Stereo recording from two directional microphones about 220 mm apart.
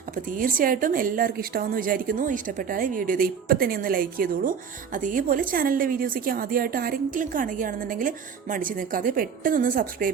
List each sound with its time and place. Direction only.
0.3 s a woman's voice: 40° right (ahead or behind)